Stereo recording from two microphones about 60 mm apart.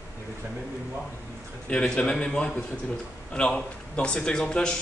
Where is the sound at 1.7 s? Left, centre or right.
Centre.